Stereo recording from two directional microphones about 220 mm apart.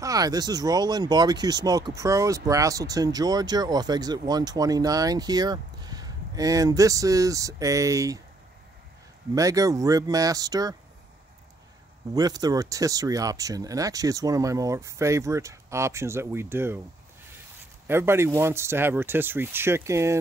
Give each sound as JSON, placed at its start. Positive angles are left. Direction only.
{"t": 0.0, "sound": "speech", "side_deg": -15}
{"t": 9.3, "sound": "speech", "side_deg": -15}
{"t": 12.1, "sound": "speech", "side_deg": -15}
{"t": 17.8, "sound": "speech", "side_deg": -10}